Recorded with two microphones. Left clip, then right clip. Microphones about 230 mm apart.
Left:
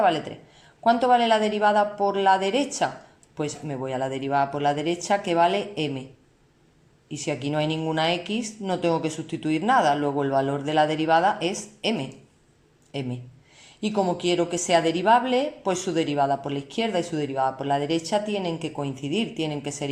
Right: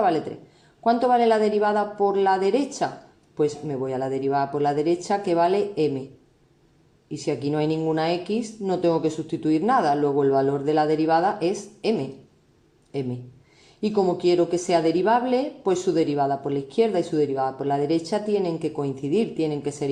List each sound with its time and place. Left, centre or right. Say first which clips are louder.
0.9 s a woman's voice: even; left
7.1 s a woman's voice: right 2 dB; left